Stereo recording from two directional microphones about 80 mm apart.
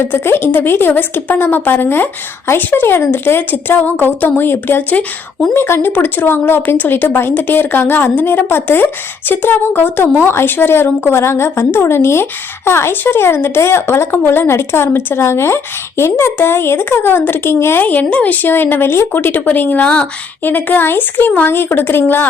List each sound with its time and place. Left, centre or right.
0.1 s a woman's voice: left